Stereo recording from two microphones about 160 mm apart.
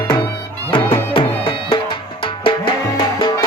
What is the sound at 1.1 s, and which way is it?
Music, 35° left (ahead or behind).